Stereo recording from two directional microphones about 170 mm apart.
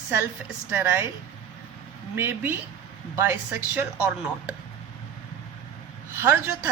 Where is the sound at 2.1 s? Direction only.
10° right (ahead or behind).